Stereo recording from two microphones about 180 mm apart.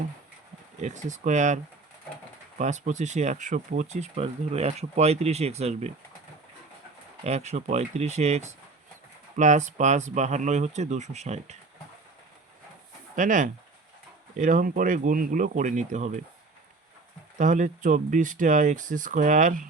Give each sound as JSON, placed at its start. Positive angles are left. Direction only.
{"t": 0.8, "sound": "speech", "side_deg": -40}
{"t": 2.6, "sound": "speech", "side_deg": -40}
{"t": 7.3, "sound": "speech", "side_deg": -40}
{"t": 13.1, "sound": "speech", "side_deg": -45}
{"t": 17.3, "sound": "speech", "side_deg": -45}